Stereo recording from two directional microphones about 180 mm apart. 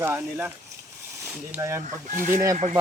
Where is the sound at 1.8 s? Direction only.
45° right (ahead or behind).